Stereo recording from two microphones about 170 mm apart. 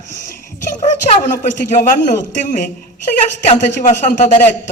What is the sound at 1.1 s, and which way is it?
A man's voice, 45° left (ahead or behind).